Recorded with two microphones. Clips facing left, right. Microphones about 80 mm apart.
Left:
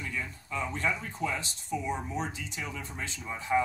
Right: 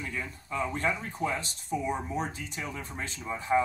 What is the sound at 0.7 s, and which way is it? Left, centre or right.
Speech, right.